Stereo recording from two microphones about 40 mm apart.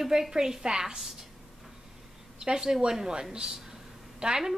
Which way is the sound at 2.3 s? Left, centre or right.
Centre.